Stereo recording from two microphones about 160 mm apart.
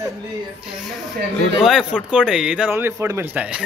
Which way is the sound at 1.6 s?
5° right (ahead or behind).